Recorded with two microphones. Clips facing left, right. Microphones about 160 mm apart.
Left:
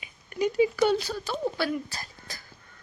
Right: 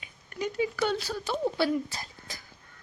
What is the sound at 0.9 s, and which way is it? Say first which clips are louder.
Speech: left 2 dB; 5° right (ahead or behind).